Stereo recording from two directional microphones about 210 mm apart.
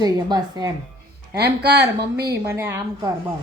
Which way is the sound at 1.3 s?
50° right (ahead or behind).